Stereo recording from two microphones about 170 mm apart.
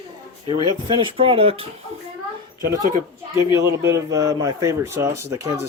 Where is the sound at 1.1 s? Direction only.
35° right (ahead or behind).